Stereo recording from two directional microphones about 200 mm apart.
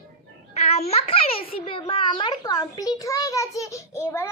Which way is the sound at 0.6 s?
30° left (ahead or behind).